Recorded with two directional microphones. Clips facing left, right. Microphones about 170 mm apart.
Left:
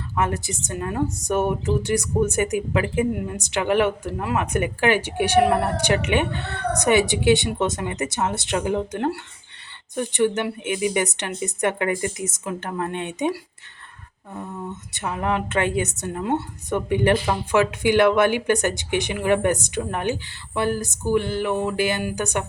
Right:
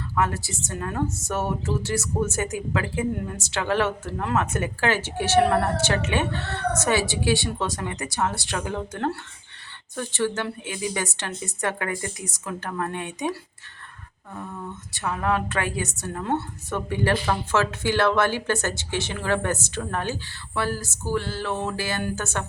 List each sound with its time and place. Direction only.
0.2 s a woman's voice: 20° left (ahead or behind)
14.3 s a woman's voice: 20° left (ahead or behind)